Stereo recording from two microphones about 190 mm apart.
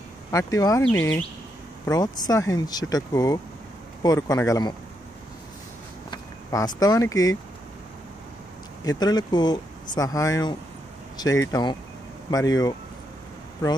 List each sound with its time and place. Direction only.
0.3 s speech: 15° left (ahead or behind)
1.9 s speech: 20° left (ahead or behind)
6.0 s speech: 20° left (ahead or behind)
8.8 s speech: 20° left (ahead or behind)